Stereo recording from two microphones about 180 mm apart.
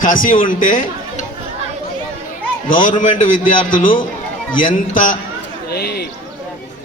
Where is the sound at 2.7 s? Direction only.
45° left (ahead or behind).